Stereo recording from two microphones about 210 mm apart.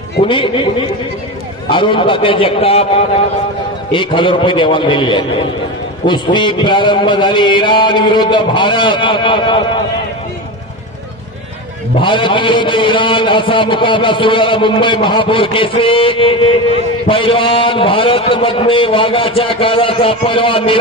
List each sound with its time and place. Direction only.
0.3 s a man's voice: 25° left (ahead or behind)
12.0 s a man's voice: 25° left (ahead or behind)